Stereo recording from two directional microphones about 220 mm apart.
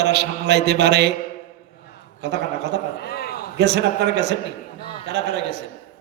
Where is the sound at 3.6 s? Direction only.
50° right (ahead or behind).